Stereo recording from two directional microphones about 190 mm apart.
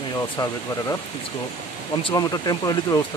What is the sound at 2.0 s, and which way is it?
Speech, 20° left (ahead or behind).